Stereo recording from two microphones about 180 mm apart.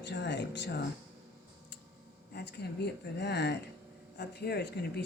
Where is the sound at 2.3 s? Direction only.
65° left (ahead or behind).